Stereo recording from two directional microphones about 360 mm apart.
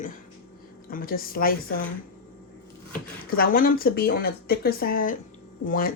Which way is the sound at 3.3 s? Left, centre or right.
Left.